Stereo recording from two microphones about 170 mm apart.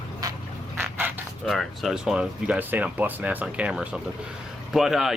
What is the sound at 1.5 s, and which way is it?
Speech, centre (ahead or behind).